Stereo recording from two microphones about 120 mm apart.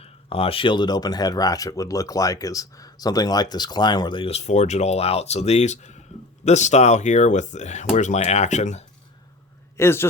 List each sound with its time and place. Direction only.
0.0 s speech: 55° left (ahead or behind)
4.3 s speech: 65° left (ahead or behind); by 8.8 s 80° left
9.7 s a man's voice: 20° left (ahead or behind)